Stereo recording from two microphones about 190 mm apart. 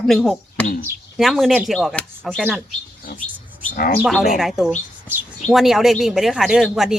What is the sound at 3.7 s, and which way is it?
Speech, 50° left (ahead or behind).